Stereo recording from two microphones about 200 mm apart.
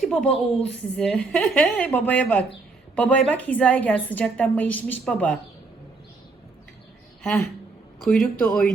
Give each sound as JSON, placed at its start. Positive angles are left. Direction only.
{"t": 0.0, "sound": "a woman's voice", "side_deg": 5}
{"t": 7.9, "sound": "speech", "side_deg": 0}